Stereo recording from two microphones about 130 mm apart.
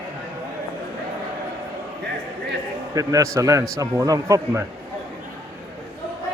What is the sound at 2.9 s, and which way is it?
Speech, 25° right (ahead or behind).